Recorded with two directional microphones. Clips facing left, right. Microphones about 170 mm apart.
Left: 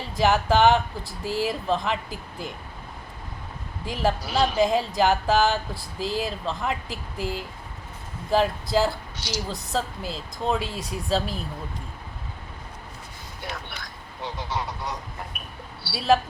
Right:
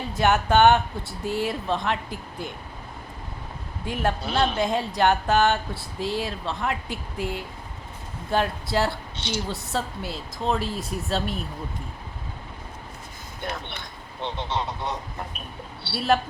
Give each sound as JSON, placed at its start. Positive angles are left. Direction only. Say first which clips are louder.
{"t": 0.1, "sound": "speech", "louder": "even", "side_deg": 0}
{"t": 3.8, "sound": "speech", "louder": "left 1 dB", "side_deg": 0}
{"t": 13.7, "sound": "speech", "louder": "right 1 dB", "side_deg": -25}
{"t": 15.3, "sound": "a sound", "louder": "right 2 dB", "side_deg": -25}
{"t": 16.0, "sound": "speech", "louder": "left 2 dB", "side_deg": 0}